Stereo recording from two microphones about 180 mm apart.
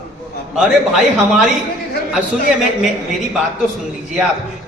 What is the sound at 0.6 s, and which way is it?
A woman's voice, 5° right (ahead or behind).